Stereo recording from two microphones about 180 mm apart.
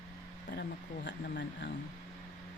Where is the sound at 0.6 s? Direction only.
80° left.